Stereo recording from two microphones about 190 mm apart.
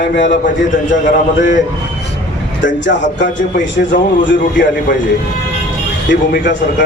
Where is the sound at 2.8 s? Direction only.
75° left (ahead or behind).